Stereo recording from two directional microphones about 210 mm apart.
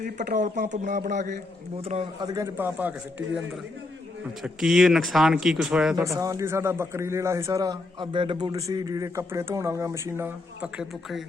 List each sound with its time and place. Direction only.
0.2 s a man's voice: 35° right (ahead or behind)
2.2 s a man's voice: 15° right (ahead or behind)
4.4 s speech: centre (ahead or behind)
6.1 s a man's voice: 15° right (ahead or behind)